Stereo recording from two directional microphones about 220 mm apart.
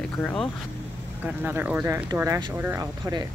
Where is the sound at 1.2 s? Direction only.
10° right (ahead or behind).